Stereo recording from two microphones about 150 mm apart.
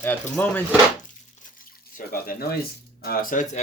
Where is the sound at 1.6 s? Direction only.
70° left (ahead or behind); by 2.6 s 90° left.